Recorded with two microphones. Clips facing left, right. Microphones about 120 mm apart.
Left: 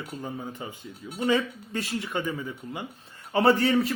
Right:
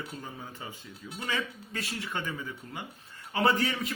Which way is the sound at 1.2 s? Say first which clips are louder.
Left 10 dB; 25° left (ahead or behind).